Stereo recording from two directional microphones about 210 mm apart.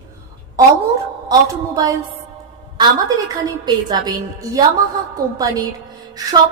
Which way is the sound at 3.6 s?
20° right (ahead or behind).